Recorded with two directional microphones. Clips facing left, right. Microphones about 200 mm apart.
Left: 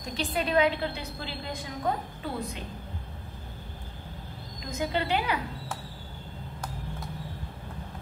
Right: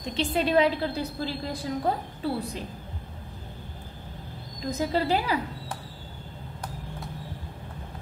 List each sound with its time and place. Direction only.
0.1 s a woman's voice: 25° right (ahead or behind)
4.6 s a woman's voice: 35° right (ahead or behind)